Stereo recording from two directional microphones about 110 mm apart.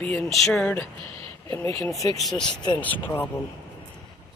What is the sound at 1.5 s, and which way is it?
Speech, 25° left (ahead or behind).